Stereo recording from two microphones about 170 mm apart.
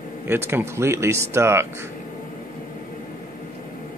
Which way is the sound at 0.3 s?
15° right (ahead or behind).